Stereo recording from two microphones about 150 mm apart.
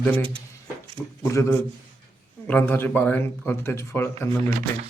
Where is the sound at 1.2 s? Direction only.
20° left (ahead or behind).